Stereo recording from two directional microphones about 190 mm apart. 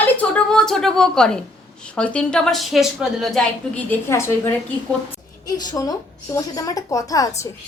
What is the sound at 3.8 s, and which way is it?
Speech, 15° left (ahead or behind).